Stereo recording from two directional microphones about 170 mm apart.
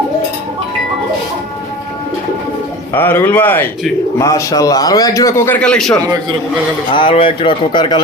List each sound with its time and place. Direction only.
2.9 s a man's voice: 10° left (ahead or behind)
5.6 s a man's voice: 5° left (ahead or behind)
6.9 s a man's voice: 30° left (ahead or behind)